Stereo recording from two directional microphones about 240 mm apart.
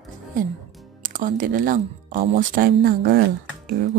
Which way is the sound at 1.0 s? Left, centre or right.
Right.